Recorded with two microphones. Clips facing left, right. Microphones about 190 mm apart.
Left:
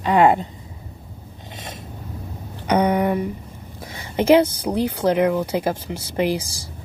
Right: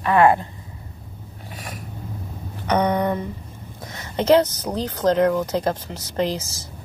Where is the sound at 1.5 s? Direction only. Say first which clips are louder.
Even; 25° left (ahead or behind).